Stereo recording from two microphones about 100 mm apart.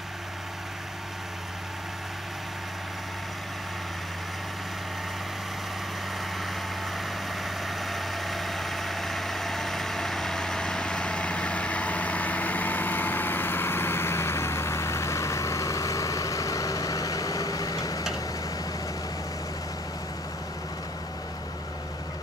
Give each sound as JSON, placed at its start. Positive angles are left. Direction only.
{"t": 7.0, "sound": "vehicle", "side_deg": 0}